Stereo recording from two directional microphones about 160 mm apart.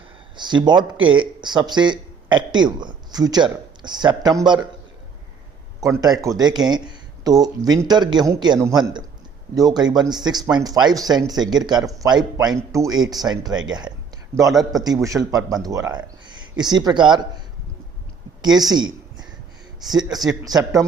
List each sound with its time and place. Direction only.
0.3 s speech: 30° right (ahead or behind)
5.8 s speech: 20° right (ahead or behind)
18.7 s a sound: 25° right (ahead or behind)
20.1 s a man's voice: centre (ahead or behind)
20.4 s speech: 20° right (ahead or behind)